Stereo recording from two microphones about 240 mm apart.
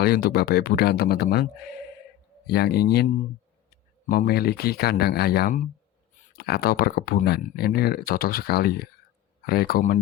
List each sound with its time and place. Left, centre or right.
0.0 s speech: left